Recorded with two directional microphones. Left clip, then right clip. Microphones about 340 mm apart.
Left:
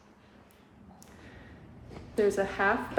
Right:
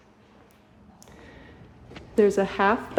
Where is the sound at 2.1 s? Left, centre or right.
Right.